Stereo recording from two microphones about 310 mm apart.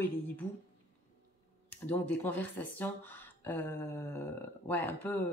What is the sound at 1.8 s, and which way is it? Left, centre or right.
Speech, centre.